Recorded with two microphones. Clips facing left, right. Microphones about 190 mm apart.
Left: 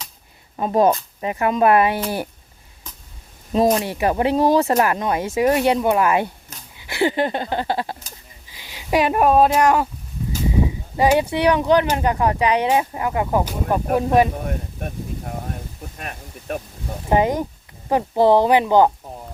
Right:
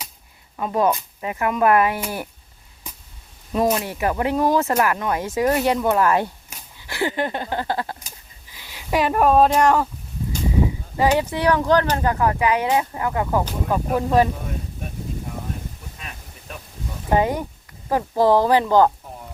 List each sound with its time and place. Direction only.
0.5 s speech: 25° left (ahead or behind)
2.8 s a sound: 10° right (ahead or behind)
3.5 s speech: 30° left (ahead or behind)
5.2 s speech: 10° left (ahead or behind)
10.9 s speech: 20° left (ahead or behind)
16.0 s a sound: 55° left (ahead or behind)
17.1 s speech: 20° left (ahead or behind)